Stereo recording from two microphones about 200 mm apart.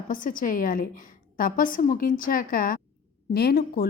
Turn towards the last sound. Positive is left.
turn(degrees=50)  # may be behind; listen again after turning